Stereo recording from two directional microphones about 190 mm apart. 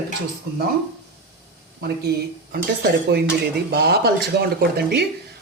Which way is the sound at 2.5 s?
55° right (ahead or behind).